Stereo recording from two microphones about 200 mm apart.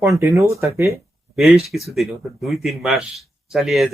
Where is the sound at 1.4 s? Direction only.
Centre (ahead or behind).